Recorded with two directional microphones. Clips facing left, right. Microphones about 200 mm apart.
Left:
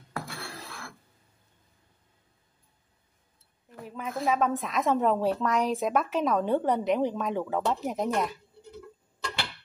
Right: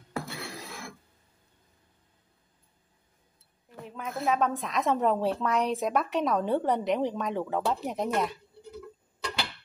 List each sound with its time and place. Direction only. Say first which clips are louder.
0.1 s dishes: right 2 dB; 15° right (ahead or behind)
3.8 s speech: left 1 dB; centre (ahead or behind)